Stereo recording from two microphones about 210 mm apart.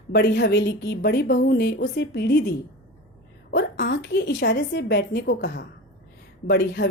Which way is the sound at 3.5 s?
50° left (ahead or behind).